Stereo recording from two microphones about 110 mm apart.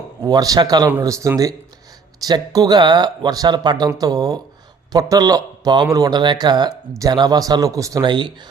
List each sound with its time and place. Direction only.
0.2 s a man's voice: 35° right (ahead or behind)
8.0 s speech: 45° right (ahead or behind)